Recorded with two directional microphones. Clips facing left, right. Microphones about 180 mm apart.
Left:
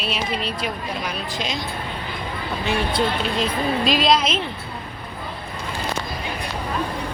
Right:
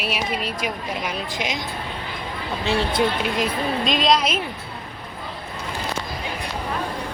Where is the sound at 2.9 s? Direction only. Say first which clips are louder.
Right 1 dB; 15° right (ahead or behind).